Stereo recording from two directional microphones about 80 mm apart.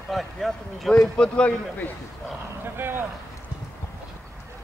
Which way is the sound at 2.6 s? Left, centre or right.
Right.